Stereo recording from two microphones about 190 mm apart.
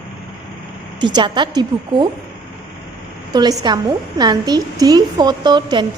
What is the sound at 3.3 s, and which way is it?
A woman's voice, 20° right (ahead or behind).